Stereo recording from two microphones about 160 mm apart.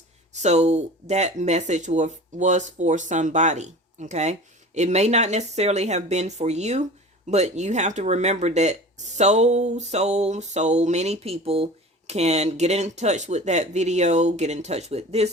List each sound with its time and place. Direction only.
0.3 s speech: 45° right (ahead or behind)